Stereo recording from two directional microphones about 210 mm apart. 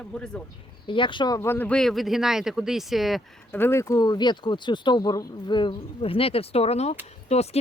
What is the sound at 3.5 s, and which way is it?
Speech, 10° left (ahead or behind).